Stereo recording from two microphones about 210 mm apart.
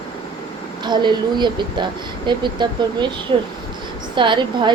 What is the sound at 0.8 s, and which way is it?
Speech, 20° right (ahead or behind).